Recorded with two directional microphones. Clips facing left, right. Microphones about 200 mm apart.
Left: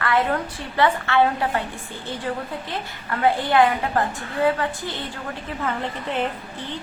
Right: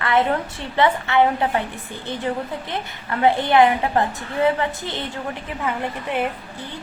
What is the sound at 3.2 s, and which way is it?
A woman's voice, 20° right (ahead or behind).